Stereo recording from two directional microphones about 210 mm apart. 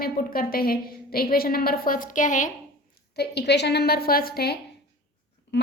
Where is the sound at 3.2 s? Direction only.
50° left (ahead or behind).